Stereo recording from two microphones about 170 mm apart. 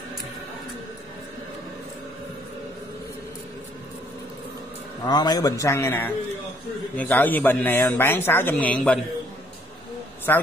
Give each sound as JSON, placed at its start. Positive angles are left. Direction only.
{"t": 5.0, "sound": "speech", "side_deg": 25}
{"t": 10.3, "sound": "speech", "side_deg": 10}